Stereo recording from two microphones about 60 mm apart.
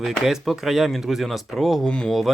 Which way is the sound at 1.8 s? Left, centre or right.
Centre.